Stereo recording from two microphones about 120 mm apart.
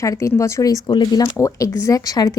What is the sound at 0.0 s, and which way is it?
A woman's voice, 25° left (ahead or behind).